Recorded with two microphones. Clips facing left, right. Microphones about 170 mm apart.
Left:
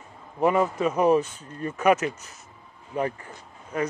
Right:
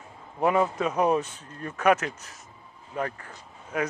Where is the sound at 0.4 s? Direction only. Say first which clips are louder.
Left 2 dB; centre (ahead or behind).